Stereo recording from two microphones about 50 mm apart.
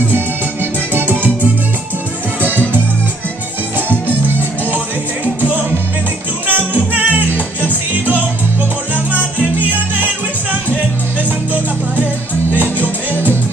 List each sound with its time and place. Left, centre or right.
0.9 s music: right
6.4 s music: right